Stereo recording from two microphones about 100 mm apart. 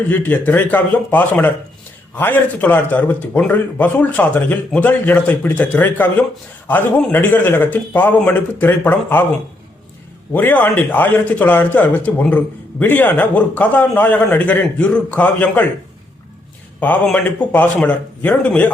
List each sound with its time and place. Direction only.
0.1 s a man's voice: 15° left (ahead or behind)
10.3 s a man's voice: 20° left (ahead or behind)
17.2 s a man's voice: 20° left (ahead or behind)